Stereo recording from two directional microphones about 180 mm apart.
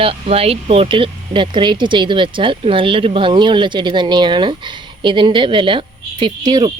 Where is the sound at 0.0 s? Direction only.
30° right (ahead or behind).